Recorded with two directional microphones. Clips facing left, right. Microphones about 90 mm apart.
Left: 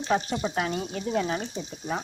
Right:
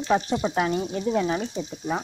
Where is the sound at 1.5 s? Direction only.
10° right (ahead or behind).